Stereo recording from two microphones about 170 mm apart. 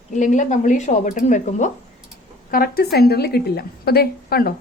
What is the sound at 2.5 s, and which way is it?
Speech, 60° left (ahead or behind).